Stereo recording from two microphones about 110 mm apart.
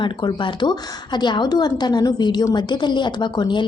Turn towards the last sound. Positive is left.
turn(degrees=45)  # may be behind; listen again after turning